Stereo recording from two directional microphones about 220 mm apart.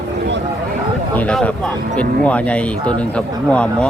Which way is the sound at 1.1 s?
5° left (ahead or behind).